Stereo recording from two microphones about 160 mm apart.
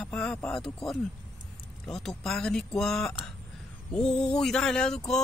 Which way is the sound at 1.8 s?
Centre (ahead or behind).